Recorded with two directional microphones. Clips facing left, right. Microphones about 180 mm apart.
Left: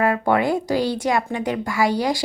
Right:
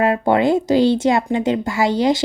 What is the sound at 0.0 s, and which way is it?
Speech, 25° right (ahead or behind).